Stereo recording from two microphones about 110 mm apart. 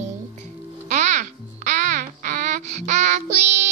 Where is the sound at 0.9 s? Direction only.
90° right.